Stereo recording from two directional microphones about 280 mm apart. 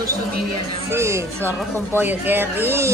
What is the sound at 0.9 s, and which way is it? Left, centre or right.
Speech, centre.